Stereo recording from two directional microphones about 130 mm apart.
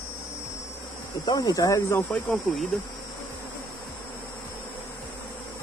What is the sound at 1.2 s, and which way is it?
Speech, 30° left (ahead or behind).